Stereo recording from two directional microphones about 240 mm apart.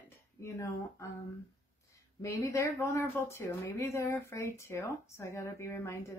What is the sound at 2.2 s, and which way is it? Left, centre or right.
Speech, centre.